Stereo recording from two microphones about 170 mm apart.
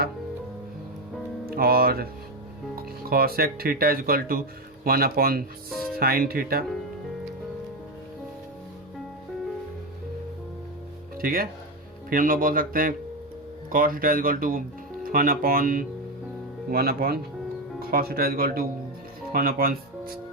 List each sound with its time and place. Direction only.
1.5 s speech: 60° right (ahead or behind)
11.2 s speech: 60° right (ahead or behind)